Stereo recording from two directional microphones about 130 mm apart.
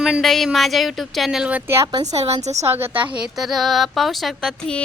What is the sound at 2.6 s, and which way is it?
Speech, 20° right (ahead or behind).